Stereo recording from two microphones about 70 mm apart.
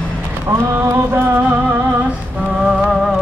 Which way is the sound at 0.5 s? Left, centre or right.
Right.